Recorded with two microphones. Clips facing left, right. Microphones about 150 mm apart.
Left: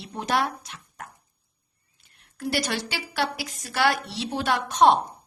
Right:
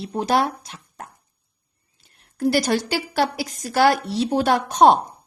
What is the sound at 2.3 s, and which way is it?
A woman's voice, 40° right (ahead or behind).